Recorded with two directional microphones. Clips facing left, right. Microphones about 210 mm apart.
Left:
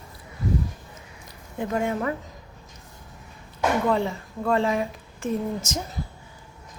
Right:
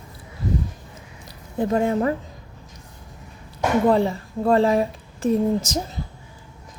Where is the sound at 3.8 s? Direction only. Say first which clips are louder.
Right 5 dB; 35° right (ahead or behind).